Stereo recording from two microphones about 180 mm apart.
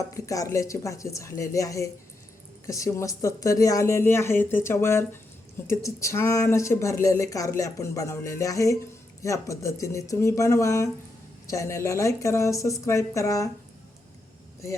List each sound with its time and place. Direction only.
0.1 s speech: 15° left (ahead or behind)